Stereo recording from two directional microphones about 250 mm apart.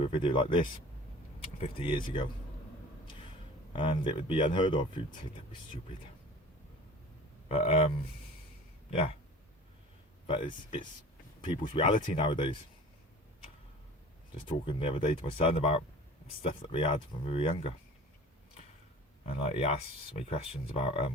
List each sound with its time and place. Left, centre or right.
0.0 s speech: centre
3.7 s speech: centre
7.4 s speech: left
10.2 s speech: centre
14.4 s speech: left
19.4 s speech: left